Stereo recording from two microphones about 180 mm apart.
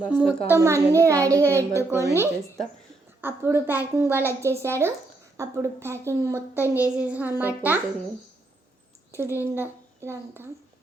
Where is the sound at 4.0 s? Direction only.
15° left (ahead or behind).